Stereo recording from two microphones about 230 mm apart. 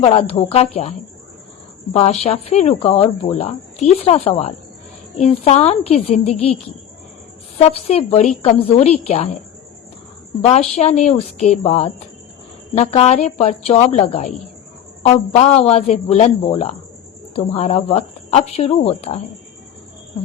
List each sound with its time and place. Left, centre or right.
0.0 s speech: left
7.6 s speech: left
10.5 s speech: left
15.4 s speech: left